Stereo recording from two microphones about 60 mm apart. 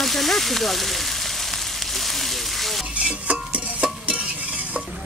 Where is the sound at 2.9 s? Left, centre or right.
Right.